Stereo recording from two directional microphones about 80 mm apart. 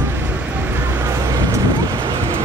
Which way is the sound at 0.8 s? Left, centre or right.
Right.